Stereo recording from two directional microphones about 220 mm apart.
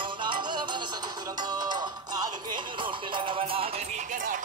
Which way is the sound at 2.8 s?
25° right (ahead or behind).